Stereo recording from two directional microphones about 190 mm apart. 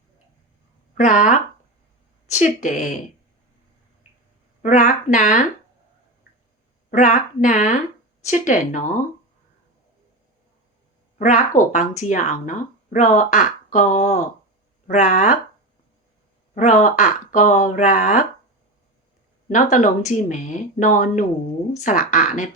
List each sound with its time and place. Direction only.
0.9 s speech: 40° left (ahead or behind)
4.6 s speech: 40° left (ahead or behind)
6.9 s speech: 40° left (ahead or behind)
11.2 s speech: 40° left (ahead or behind)
16.6 s speech: 40° left (ahead or behind)
19.5 s speech: 40° left (ahead or behind)